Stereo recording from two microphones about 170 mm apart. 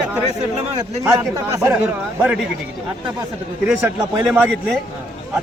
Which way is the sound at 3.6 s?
10° right (ahead or behind).